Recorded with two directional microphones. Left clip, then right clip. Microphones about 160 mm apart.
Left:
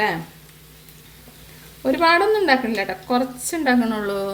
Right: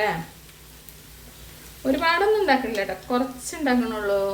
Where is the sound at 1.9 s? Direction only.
90° left.